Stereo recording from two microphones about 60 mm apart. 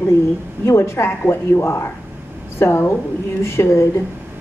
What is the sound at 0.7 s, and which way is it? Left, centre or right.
A woman's voice, left.